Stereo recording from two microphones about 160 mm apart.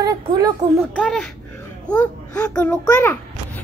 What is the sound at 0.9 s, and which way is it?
A woman's voice, 5° left (ahead or behind).